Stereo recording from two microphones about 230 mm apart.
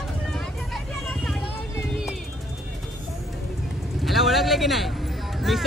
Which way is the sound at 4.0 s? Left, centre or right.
Centre.